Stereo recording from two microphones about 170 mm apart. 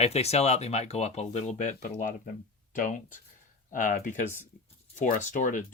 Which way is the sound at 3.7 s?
50° left (ahead or behind).